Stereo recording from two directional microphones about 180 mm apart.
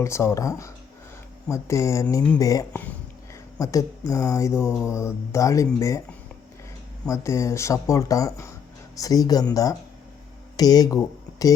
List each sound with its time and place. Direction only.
0.0 s speech: 15° left (ahead or behind)
4.6 s mantra: 5° right (ahead or behind)
4.9 s speech: 15° left (ahead or behind)
7.1 s speech: 15° left (ahead or behind)